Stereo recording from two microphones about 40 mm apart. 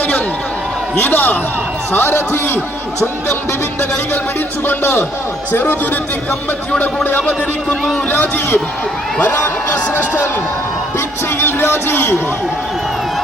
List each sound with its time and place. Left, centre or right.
0.9 s speech: left
1.9 s a man's voice: left
5.5 s speech: left
7.2 s speech: centre
11.3 s a man's voice: left